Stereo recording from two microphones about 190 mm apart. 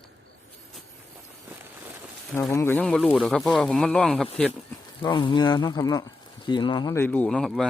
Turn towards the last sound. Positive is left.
turn(degrees=0)  # may be behind; listen again after turning